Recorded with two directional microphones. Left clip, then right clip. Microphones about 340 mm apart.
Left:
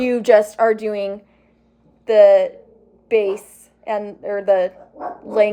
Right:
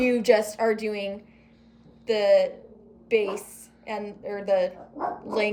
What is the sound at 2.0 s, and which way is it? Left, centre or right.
A woman's voice, centre.